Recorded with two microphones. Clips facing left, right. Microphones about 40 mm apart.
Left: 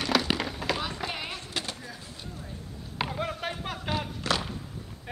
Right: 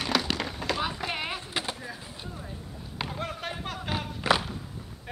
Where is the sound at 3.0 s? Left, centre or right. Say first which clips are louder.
Left 3 dB; centre.